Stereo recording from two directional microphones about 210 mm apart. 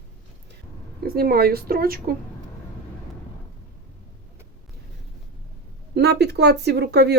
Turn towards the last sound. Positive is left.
turn(degrees=-50)  # may be behind; listen again after turning